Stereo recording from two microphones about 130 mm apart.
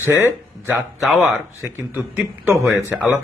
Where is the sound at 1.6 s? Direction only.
15° right (ahead or behind).